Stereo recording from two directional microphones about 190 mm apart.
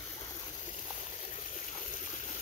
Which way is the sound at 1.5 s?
40° left (ahead or behind).